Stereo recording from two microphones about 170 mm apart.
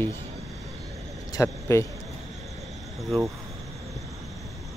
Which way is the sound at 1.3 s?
15° left (ahead or behind).